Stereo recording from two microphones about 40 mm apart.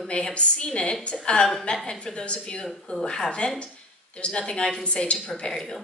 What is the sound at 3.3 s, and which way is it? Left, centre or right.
A woman's voice, left.